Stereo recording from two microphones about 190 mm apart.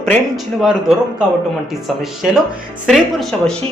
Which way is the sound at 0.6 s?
Centre (ahead or behind).